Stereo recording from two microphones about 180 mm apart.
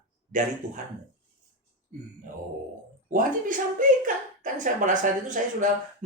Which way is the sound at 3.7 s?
50° right (ahead or behind).